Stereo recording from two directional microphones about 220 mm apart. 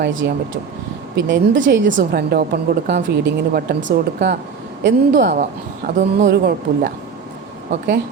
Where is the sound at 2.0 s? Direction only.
45° right (ahead or behind).